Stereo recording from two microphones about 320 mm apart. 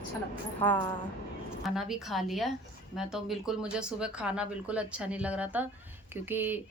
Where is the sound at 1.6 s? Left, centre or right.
Centre.